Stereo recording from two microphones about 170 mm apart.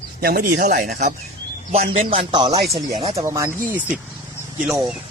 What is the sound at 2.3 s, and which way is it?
Speech, 25° right (ahead or behind).